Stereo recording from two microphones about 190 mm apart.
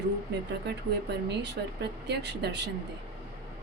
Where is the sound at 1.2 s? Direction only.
65° right (ahead or behind).